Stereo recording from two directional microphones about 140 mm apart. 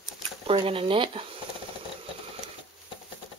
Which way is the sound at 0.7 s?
40° right (ahead or behind).